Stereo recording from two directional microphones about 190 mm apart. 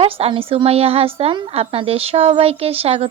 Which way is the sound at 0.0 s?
30° right (ahead or behind).